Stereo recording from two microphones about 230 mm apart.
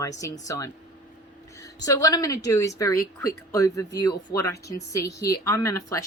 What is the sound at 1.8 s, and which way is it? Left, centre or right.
Speech, centre.